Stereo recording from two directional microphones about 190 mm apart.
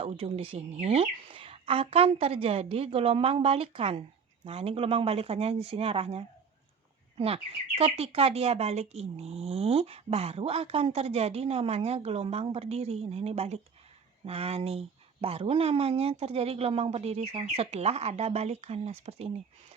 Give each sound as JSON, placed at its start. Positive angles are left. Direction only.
{"t": 0.0, "sound": "speech", "side_deg": -30}